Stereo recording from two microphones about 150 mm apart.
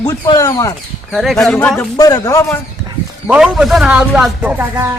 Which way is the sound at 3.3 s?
5° right (ahead or behind).